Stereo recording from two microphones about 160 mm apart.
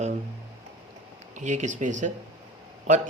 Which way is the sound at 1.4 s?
50° right (ahead or behind).